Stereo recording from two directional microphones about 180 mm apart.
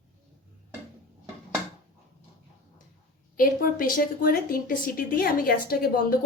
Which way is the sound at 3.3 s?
50° left (ahead or behind).